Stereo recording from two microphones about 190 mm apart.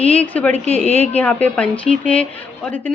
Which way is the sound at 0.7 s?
35° left (ahead or behind).